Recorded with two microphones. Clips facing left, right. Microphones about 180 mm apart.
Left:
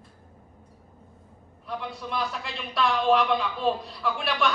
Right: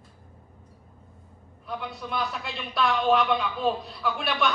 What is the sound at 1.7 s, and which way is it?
A man's voice, centre (ahead or behind).